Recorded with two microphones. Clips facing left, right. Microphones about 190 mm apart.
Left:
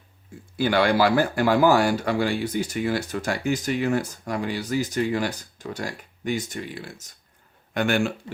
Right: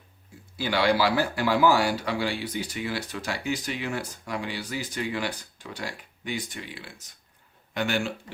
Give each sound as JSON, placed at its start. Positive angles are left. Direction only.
{"t": 0.5, "sound": "speech", "side_deg": 50}